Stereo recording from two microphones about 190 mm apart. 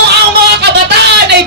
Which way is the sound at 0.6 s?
60° right (ahead or behind).